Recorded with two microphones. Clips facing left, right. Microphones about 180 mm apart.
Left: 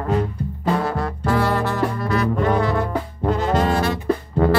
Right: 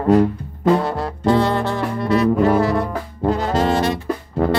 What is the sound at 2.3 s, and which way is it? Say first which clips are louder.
Brass instrument: right 4 dB; 5° right (ahead or behind).